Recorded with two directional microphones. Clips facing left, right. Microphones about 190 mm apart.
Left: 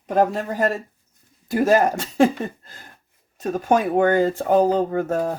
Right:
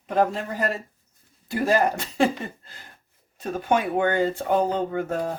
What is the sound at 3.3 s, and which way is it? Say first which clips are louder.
Speech: left 4 dB; 40° left (ahead or behind).